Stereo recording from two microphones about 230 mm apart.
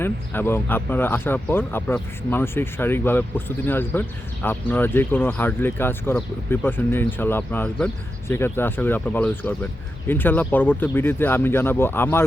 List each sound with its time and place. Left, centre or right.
0.0 s speech: centre